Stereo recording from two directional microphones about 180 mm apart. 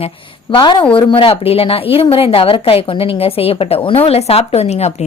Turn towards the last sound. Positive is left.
turn(degrees=35)  # may be behind; listen again after turning